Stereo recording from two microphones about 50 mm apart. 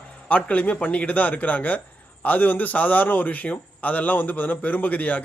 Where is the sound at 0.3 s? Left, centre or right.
Left.